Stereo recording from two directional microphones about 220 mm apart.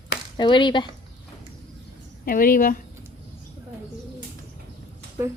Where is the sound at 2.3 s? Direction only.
40° left (ahead or behind).